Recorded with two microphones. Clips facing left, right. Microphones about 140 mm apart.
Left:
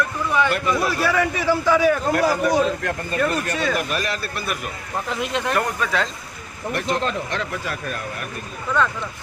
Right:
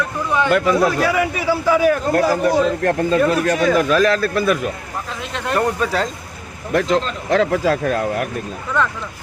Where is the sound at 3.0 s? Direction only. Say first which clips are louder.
Right 7 dB; 90° right.